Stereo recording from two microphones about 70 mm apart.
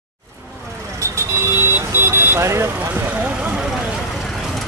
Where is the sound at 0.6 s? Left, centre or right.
Right.